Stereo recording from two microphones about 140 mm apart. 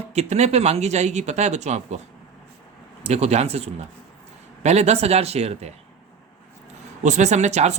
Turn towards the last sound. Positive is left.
turn(degrees=-55)  # may be behind; listen again after turning